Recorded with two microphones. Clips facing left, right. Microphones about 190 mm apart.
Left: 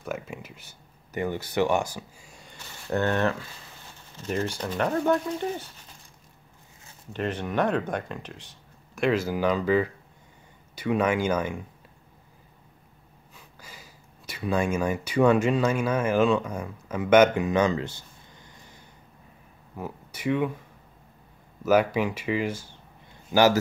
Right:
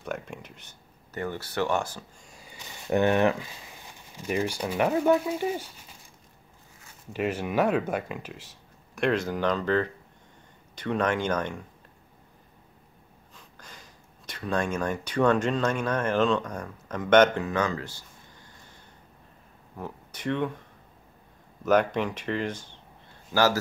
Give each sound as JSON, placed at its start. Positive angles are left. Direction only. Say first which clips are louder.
{"t": 0.0, "sound": "speech", "louder": "left 1 dB", "side_deg": 5}
{"t": 2.6, "sound": "speech", "louder": "right 3 dB", "side_deg": -15}
{"t": 7.1, "sound": "speech", "louder": "right 1 dB", "side_deg": -10}
{"t": 13.3, "sound": "speech", "louder": "left 1 dB", "side_deg": 5}
{"t": 19.8, "sound": "speech", "louder": "left 3 dB", "side_deg": 10}
{"t": 21.6, "sound": "speech", "louder": "left 1 dB", "side_deg": 5}